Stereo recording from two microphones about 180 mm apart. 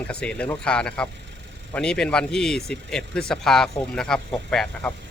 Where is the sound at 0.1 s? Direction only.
5° left (ahead or behind).